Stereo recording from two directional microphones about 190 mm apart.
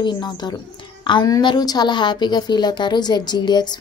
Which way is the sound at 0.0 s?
20° left (ahead or behind).